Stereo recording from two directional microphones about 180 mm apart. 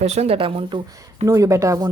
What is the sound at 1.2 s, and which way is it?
Speech, 15° right (ahead or behind).